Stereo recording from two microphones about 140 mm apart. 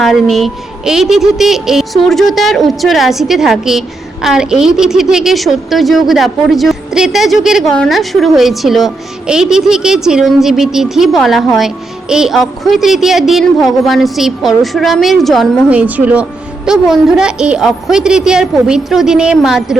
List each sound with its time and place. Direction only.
0.0 s a woman's voice: centre (ahead or behind)
15.7 s a woman's voice: 10° right (ahead or behind)